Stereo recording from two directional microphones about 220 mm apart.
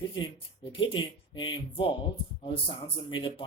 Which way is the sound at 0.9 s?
20° left (ahead or behind).